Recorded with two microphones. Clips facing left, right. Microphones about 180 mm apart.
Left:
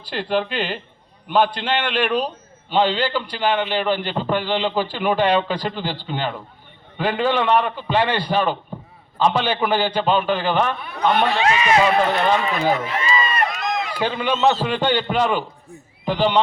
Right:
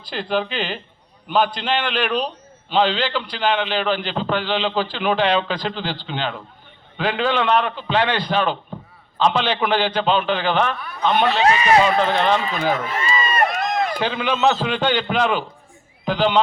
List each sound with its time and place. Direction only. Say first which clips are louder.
0.1 s a man's voice: left 1 dB; 5° left (ahead or behind)
11.4 s speech: right 4 dB; 35° right (ahead or behind)
11.9 s a man's voice: even; 5° left (ahead or behind)
13.0 s run: right 1 dB; 45° right (ahead or behind)
14.0 s a man's voice: left 3 dB; 5° left (ahead or behind)